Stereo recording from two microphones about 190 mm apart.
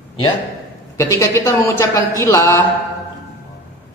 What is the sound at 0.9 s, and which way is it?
A man's voice, 15° left (ahead or behind).